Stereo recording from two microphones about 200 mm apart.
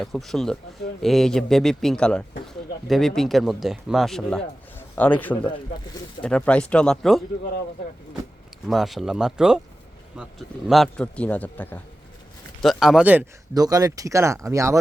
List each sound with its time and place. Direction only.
0.0 s a man's voice: centre (ahead or behind)
8.6 s speech: centre (ahead or behind)
12.6 s speech: centre (ahead or behind)
13.5 s speech: 20° right (ahead or behind)